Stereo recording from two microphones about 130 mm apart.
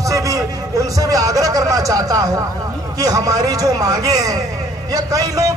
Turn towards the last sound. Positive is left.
turn(degrees=-30)  # may be behind; listen again after turning